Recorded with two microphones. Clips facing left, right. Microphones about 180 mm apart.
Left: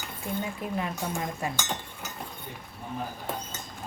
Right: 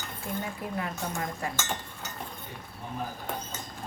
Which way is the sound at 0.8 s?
20° left (ahead or behind).